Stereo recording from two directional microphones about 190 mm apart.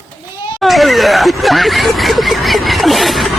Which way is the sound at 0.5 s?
Centre (ahead or behind).